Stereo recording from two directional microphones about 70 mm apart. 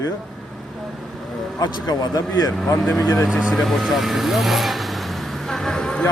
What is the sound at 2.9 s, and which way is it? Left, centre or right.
Speech, left.